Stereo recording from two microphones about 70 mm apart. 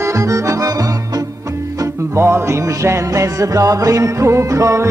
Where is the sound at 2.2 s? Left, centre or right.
Right.